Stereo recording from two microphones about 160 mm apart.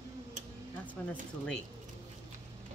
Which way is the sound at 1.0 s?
10° left (ahead or behind).